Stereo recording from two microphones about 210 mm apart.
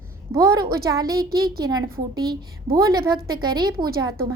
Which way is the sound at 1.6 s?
20° right (ahead or behind).